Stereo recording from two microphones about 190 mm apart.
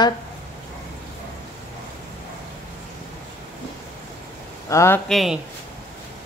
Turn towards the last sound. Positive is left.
turn(degrees=0)  # may be behind; listen again after turning